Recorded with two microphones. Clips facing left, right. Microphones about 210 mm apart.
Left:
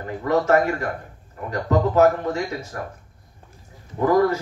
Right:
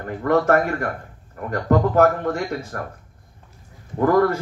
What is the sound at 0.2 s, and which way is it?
A man's voice, 55° right (ahead or behind).